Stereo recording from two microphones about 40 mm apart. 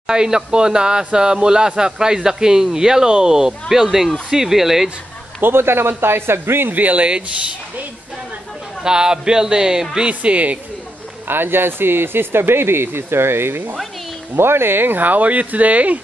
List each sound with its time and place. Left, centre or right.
0.0 s speech: centre
5.4 s speech: right
6.7 s a man's voice: right
8.8 s speech: centre
10.2 s a man's voice: right
11.2 s speech: right
14.3 s speech: right